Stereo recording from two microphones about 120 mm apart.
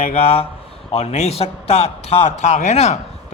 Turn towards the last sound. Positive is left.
turn(degrees=65)  # may be behind; listen again after turning